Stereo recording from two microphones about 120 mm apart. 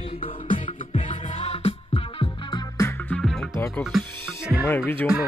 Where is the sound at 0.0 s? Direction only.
50° left (ahead or behind).